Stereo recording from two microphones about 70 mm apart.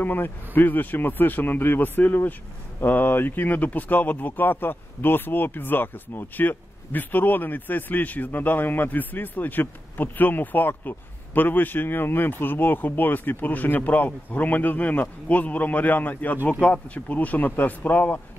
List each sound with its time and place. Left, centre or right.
0.0 s speech: left